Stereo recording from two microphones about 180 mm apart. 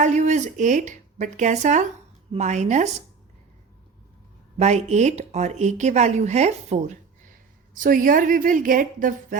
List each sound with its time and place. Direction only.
0.0 s speech: 40° right (ahead or behind)
4.5 s speech: 40° right (ahead or behind)